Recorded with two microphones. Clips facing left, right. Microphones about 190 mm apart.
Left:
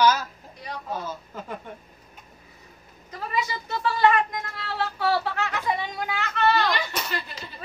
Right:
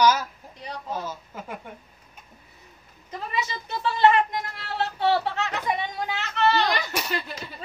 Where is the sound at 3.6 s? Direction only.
20° right (ahead or behind).